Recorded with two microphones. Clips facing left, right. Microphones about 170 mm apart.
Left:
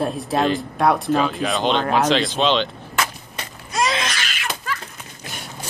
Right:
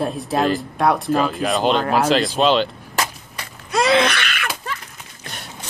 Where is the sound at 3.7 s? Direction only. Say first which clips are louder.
Right 6 dB; 60° right (ahead or behind).